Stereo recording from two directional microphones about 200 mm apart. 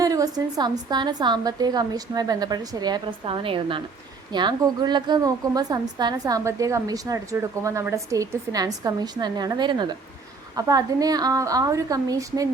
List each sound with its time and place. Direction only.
0.0 s a woman's voice: 20° right (ahead or behind)